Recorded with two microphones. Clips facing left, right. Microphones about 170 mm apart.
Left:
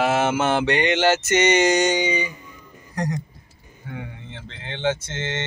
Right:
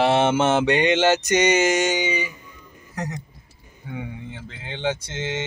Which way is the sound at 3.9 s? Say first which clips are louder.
Right 3 dB; 10° right (ahead or behind).